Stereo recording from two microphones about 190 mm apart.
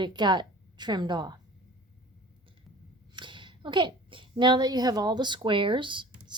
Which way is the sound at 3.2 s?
25° right (ahead or behind).